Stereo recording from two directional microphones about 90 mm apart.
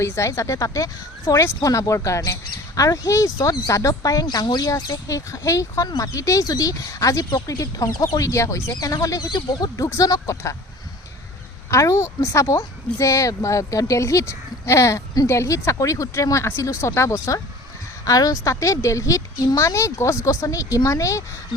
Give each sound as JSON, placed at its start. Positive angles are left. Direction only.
{"t": 0.0, "sound": "speech", "side_deg": 35}
{"t": 9.8, "sound": "speech", "side_deg": 40}
{"t": 11.7, "sound": "speech", "side_deg": 35}